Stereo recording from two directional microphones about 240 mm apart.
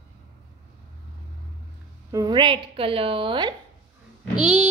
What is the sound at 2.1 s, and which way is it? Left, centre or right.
A woman's voice, centre.